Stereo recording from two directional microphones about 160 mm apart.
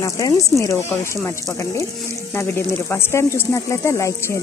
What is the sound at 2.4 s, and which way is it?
Speech, 15° left (ahead or behind).